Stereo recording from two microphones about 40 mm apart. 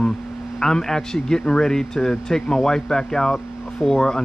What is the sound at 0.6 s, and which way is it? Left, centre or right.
Speech, centre.